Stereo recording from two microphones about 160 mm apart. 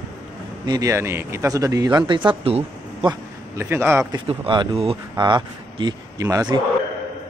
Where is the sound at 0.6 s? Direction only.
25° right (ahead or behind).